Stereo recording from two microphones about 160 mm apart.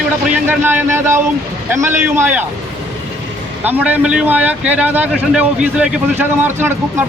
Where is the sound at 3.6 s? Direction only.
10° right (ahead or behind).